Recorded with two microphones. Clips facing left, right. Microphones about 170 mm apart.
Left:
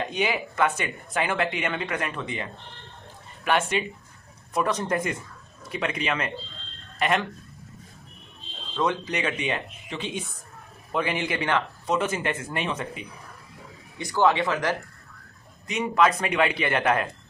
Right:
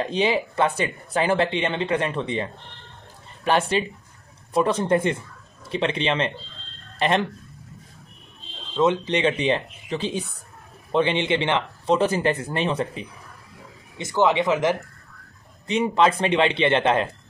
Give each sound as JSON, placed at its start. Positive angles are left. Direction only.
{"t": 0.0, "sound": "speech", "side_deg": -30}
{"t": 3.4, "sound": "speech", "side_deg": -30}
{"t": 8.7, "sound": "speech", "side_deg": -25}
{"t": 13.9, "sound": "speech", "side_deg": -20}
{"t": 15.6, "sound": "speech", "side_deg": -30}